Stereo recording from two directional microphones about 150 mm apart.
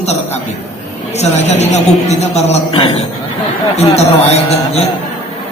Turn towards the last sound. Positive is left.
turn(degrees=45)  # may be behind; listen again after turning